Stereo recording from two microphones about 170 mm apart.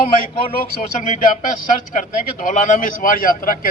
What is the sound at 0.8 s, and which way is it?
Speech, 45° left (ahead or behind).